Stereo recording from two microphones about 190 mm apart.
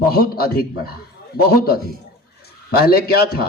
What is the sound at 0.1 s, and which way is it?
Speech, 55° left (ahead or behind).